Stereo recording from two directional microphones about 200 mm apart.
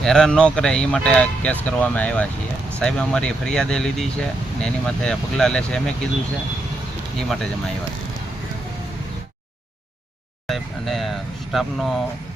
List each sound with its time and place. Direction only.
0.0 s speech: 5° left (ahead or behind)
7.2 s speech: centre (ahead or behind)
10.4 s speech: centre (ahead or behind)